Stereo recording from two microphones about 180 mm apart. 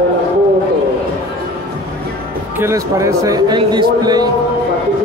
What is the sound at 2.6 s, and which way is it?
A man's voice, 15° right (ahead or behind).